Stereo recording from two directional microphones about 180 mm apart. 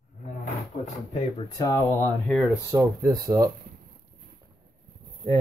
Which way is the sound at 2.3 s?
5° right (ahead or behind).